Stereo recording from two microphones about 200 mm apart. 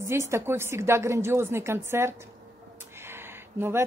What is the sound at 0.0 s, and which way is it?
Speech, 15° right (ahead or behind).